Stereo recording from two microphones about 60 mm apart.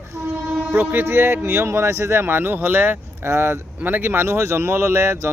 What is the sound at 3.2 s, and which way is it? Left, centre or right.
Speech, right.